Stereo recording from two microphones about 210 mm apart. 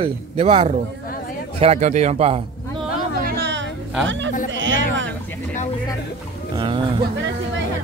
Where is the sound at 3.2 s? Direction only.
50° right (ahead or behind).